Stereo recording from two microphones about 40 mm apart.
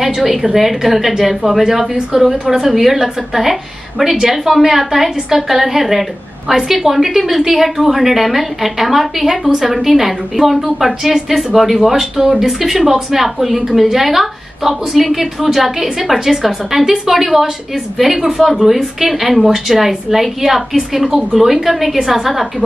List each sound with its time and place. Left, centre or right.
0.0 s a woman's voice: centre
21.1 s a woman's voice: centre
21.4 s a woman's voice: centre